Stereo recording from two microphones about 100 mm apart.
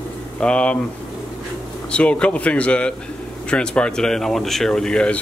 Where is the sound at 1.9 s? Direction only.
10° left (ahead or behind).